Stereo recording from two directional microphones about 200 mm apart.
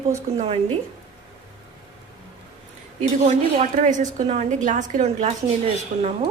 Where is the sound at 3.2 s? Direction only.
35° right (ahead or behind).